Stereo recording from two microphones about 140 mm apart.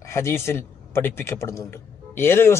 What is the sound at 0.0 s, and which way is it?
A man's voice, 20° left (ahead or behind).